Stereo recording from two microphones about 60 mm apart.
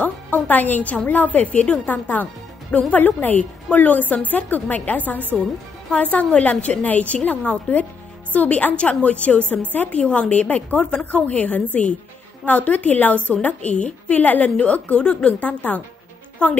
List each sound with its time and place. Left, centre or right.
0.0 s a woman's voice: left
10.8 s a woman's voice: centre
11.1 s a woman's voice: left